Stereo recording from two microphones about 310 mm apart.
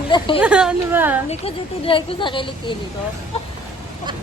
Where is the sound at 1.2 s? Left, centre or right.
Centre.